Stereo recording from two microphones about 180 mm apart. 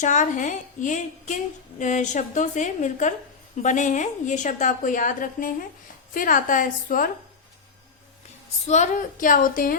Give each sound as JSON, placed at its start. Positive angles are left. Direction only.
{"t": 0.0, "sound": "a woman's voice", "side_deg": 45}
{"t": 8.6, "sound": "a woman's voice", "side_deg": 40}